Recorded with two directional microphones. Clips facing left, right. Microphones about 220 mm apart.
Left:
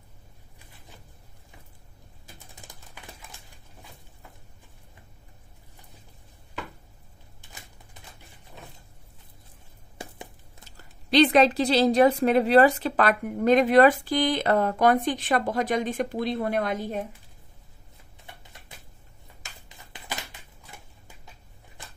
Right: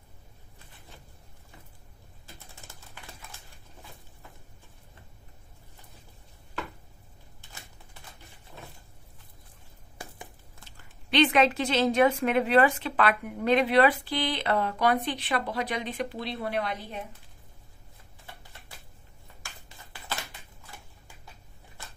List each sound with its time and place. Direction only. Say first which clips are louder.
2.3 s typing: left 1 dB; 15° left (ahead or behind)
10.8 s a woman's voice: left 4 dB; 35° left (ahead or behind)
19.4 s a sound: even; 20° left (ahead or behind)